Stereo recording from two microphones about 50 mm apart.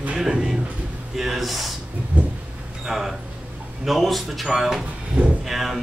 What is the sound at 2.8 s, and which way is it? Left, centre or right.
Speech, centre.